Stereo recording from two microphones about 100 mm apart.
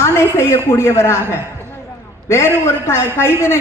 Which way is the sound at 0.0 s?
25° left (ahead or behind).